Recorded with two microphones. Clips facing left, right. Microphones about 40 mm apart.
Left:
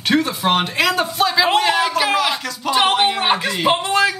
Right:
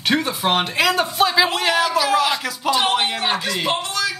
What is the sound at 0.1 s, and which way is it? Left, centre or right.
Speech, centre.